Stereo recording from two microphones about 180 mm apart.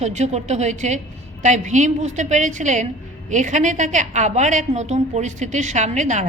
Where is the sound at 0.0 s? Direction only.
40° right (ahead or behind).